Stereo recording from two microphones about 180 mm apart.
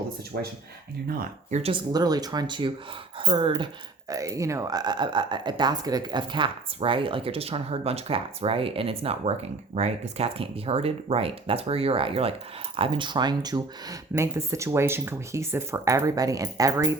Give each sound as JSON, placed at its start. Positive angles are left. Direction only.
{"t": 1.2, "sound": "speech", "side_deg": -40}
{"t": 1.7, "sound": "speech", "side_deg": -20}